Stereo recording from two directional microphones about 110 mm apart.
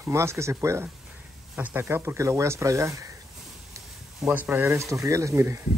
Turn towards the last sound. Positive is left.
turn(degrees=-25)  # may be behind; listen again after turning